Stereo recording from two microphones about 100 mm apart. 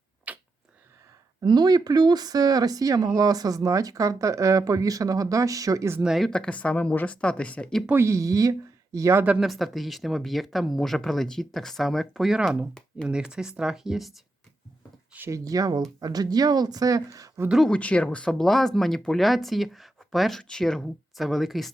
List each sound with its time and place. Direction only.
0.3 s a sound: 15° right (ahead or behind)
1.4 s speech: 45° right (ahead or behind)
6.0 s speech: 5° right (ahead or behind)
7.9 s speech: 25° right (ahead or behind)
9.4 s speech: centre (ahead or behind)
15.3 s speech: 35° right (ahead or behind)
17.7 s speech: 10° left (ahead or behind)